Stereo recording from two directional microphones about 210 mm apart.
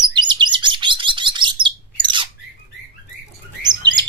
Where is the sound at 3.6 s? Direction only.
20° right (ahead or behind).